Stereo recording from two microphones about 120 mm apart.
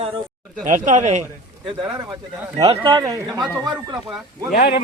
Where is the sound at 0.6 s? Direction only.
90° right.